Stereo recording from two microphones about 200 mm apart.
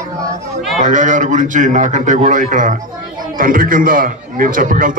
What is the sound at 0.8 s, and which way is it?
A man's voice, 40° right (ahead or behind).